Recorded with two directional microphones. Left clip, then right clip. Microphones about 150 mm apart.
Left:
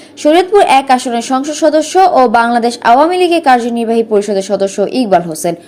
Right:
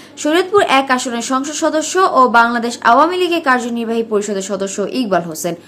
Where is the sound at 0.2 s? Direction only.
20° left (ahead or behind).